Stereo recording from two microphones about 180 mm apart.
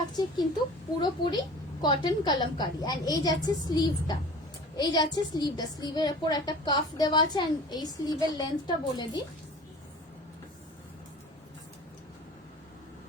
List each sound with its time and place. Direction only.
1.0 s a woman's voice: 25° left (ahead or behind)